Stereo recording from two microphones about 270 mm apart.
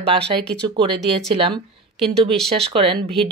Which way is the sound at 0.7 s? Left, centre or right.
Centre.